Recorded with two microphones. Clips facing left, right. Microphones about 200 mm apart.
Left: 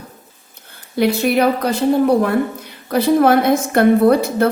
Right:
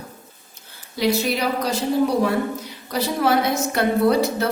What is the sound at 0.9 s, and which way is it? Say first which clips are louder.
A woman's voice: left 6 dB; 55° left (ahead or behind).